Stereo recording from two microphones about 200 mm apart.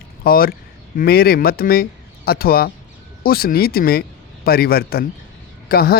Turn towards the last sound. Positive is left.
turn(degrees=50)  # may be behind; listen again after turning